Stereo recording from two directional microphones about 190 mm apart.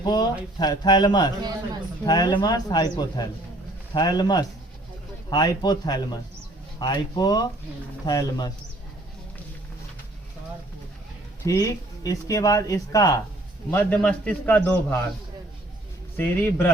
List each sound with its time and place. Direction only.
0.0 s a sound: 20° left (ahead or behind)
0.6 s speech: 20° left (ahead or behind)
11.4 s speech: 20° left (ahead or behind)
13.7 s speech: 5° left (ahead or behind)
16.1 s speech: 10° left (ahead or behind)